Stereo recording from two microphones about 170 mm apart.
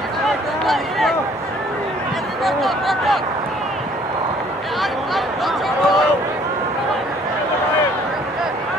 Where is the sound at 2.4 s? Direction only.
Centre (ahead or behind).